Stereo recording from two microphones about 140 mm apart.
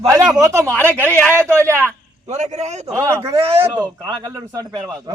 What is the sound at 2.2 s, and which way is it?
Speech, 55° right (ahead or behind).